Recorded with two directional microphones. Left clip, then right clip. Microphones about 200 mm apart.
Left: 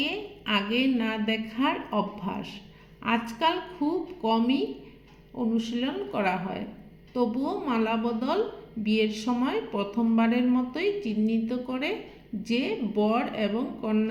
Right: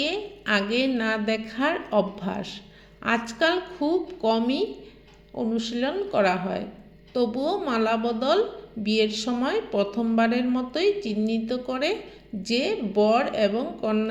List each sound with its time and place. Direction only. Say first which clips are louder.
0.0 s speech: right 3 dB; 15° right (ahead or behind)